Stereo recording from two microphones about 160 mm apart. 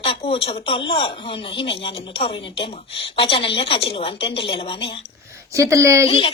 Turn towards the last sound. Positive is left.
turn(degrees=35)  # may be behind; listen again after turning